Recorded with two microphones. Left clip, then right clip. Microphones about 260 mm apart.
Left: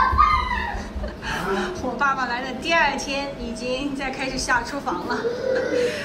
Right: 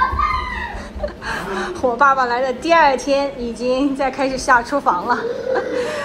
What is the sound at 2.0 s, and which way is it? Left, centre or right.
Speech, centre.